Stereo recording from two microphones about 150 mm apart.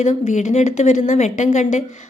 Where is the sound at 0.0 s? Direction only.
50° left (ahead or behind).